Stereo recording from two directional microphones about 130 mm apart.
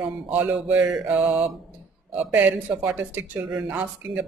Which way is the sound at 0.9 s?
10° right (ahead or behind).